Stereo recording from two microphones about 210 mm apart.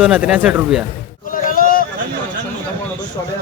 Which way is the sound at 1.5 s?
40° left (ahead or behind).